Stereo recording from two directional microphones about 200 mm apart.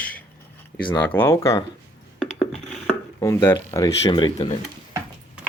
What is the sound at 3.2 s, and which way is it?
Speech, 10° left (ahead or behind).